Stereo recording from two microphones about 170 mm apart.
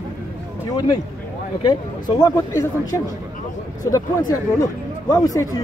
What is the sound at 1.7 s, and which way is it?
Speech, 20° left (ahead or behind).